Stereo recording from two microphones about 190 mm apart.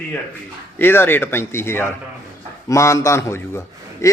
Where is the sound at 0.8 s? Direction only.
10° left (ahead or behind).